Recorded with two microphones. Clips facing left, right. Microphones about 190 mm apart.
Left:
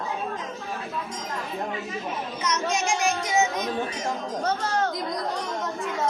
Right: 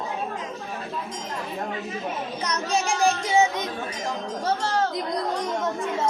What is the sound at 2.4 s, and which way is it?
Speech, 35° right (ahead or behind).